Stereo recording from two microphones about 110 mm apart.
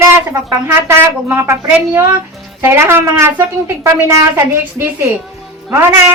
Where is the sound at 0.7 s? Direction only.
25° right (ahead or behind).